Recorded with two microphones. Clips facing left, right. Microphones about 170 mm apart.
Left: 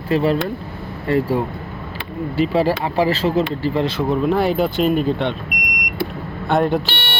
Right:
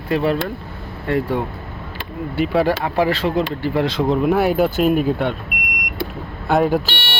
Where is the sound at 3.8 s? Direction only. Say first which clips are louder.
Right 2 dB; 15° right (ahead or behind).